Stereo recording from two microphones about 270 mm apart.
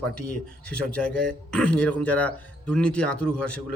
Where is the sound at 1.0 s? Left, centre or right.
Centre.